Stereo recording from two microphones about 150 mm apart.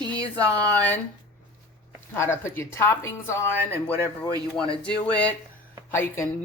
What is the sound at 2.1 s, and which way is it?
A woman's voice, 15° left (ahead or behind).